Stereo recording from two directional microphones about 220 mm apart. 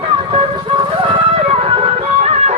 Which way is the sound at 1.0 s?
25° right (ahead or behind).